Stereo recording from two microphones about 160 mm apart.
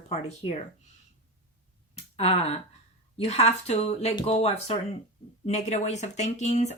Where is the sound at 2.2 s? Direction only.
40° left (ahead or behind).